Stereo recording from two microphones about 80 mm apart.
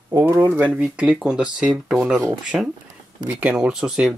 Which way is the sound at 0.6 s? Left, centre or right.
Centre.